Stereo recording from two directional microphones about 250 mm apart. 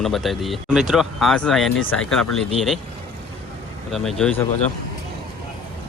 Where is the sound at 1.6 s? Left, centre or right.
Left.